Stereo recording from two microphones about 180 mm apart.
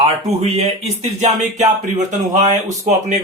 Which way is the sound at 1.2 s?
40° right (ahead or behind).